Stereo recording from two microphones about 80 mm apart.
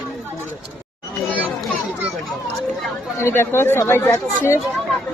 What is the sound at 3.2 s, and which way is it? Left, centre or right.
Speech, left.